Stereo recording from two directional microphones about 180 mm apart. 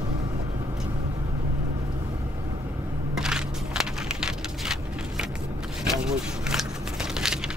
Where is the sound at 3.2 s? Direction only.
5° right (ahead or behind).